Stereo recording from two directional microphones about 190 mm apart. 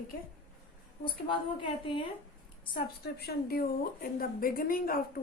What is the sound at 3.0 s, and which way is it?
A woman's voice, 55° left (ahead or behind).